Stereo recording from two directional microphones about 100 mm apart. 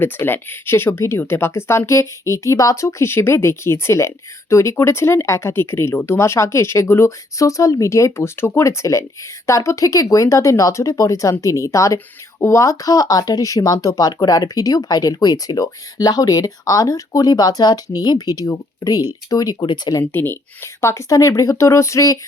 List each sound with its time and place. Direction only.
0.0 s speech: 20° left (ahead or behind); by 20.0 s 45° left (ahead or behind)
20.1 s speech: 20° left (ahead or behind)